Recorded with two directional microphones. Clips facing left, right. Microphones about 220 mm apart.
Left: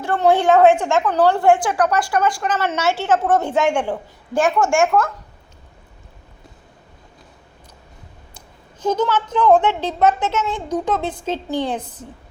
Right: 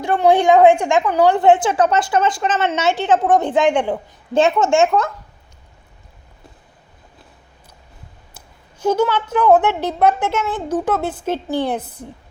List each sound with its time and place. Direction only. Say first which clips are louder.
0.0 s a woman's voice: right 2 dB; 15° right (ahead or behind)
8.8 s a woman's voice: right 2 dB; 10° right (ahead or behind)